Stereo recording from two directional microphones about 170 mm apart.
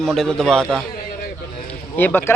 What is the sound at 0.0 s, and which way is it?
Speech, 5° left (ahead or behind).